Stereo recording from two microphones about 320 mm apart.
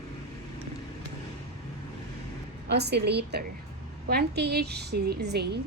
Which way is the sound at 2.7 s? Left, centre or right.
Right.